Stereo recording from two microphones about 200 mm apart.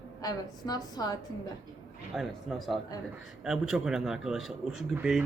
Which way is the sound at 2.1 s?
5° right (ahead or behind).